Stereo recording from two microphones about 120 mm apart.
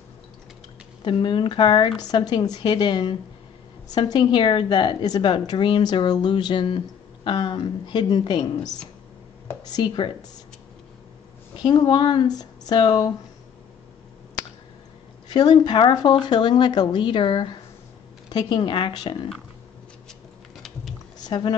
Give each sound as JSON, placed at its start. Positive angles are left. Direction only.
{"t": 1.0, "sound": "a woman's voice", "side_deg": 45}
{"t": 11.5, "sound": "a woman's voice", "side_deg": 40}
{"t": 15.3, "sound": "a woman's voice", "side_deg": 35}
{"t": 21.2, "sound": "speech", "side_deg": 40}